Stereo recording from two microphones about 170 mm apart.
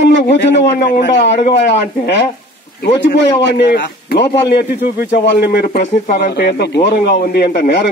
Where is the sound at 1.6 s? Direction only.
70° left (ahead or behind).